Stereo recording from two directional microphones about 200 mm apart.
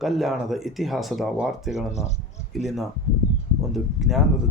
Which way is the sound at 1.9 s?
35° left (ahead or behind).